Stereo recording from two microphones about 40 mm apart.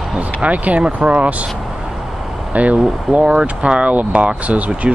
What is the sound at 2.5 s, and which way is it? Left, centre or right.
Speech, right.